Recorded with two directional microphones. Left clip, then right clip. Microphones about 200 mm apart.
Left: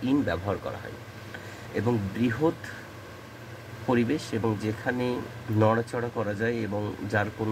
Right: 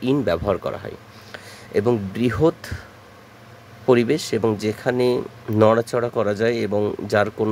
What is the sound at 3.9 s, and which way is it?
Speech, 60° right (ahead or behind).